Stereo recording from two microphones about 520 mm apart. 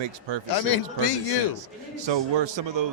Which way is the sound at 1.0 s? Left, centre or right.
Left.